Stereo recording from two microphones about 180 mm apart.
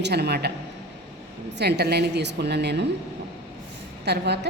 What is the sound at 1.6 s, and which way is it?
A woman's voice, 65° right (ahead or behind).